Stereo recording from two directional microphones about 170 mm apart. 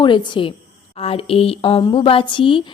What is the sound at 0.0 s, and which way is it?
A woman's voice, 25° left (ahead or behind).